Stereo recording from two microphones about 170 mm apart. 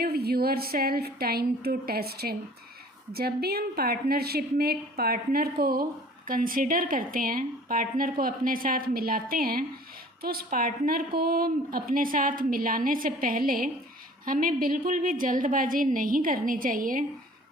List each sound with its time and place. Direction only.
0.0 s a woman's voice: 70° right (ahead or behind); by 17.1 s 55° right (ahead or behind)